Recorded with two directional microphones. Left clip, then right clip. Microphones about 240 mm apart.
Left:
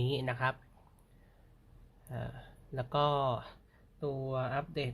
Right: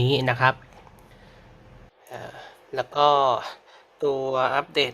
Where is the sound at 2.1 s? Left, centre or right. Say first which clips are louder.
Right 8 dB; centre.